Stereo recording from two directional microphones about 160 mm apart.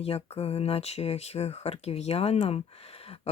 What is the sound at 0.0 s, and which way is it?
Speech, 40° left (ahead or behind).